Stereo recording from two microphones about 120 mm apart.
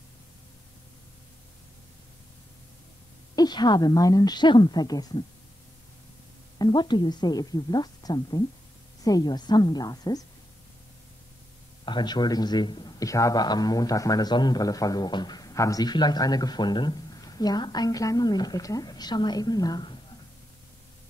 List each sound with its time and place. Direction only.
3.3 s a man's voice: 35° left (ahead or behind)
6.6 s a man's voice: 35° left (ahead or behind)
11.8 s a man's voice: 40° left (ahead or behind)